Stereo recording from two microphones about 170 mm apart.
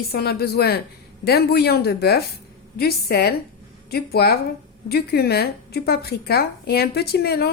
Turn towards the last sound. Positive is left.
turn(degrees=70)  # may be behind; listen again after turning